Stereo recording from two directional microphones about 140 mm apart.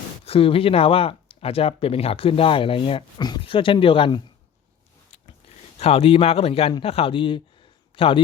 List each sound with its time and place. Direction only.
0.3 s speech: 40° left (ahead or behind)
5.8 s speech: 45° left (ahead or behind)